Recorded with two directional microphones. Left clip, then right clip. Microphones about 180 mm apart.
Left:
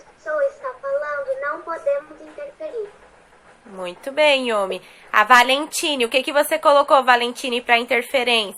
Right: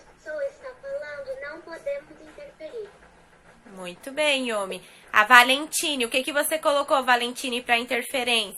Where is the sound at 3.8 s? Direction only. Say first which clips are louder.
Left 8 dB; 15° left (ahead or behind).